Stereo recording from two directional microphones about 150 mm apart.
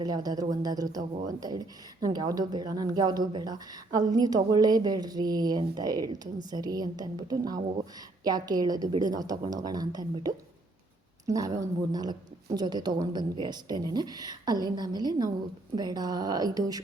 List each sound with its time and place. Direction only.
0.0 s speech: 25° right (ahead or behind)